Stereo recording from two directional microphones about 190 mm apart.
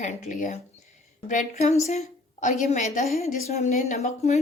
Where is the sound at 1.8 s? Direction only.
40° left (ahead or behind).